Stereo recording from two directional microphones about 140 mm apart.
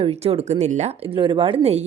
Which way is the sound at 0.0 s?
45° right (ahead or behind).